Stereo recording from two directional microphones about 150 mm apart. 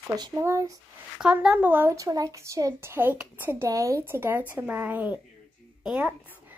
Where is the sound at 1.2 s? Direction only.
5° right (ahead or behind).